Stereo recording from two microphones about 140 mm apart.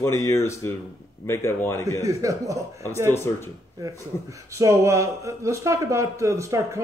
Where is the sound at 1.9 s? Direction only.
25° right (ahead or behind).